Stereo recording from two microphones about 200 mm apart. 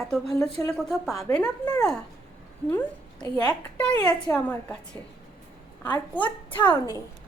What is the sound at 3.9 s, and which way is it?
Speech, 20° left (ahead or behind).